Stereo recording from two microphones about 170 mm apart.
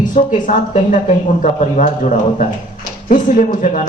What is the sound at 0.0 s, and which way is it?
Speech, 50° left (ahead or behind).